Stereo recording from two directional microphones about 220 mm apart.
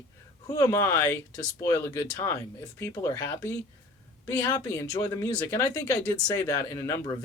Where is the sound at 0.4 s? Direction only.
15° left (ahead or behind).